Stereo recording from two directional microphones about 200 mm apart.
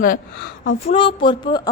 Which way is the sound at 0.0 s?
50° left (ahead or behind).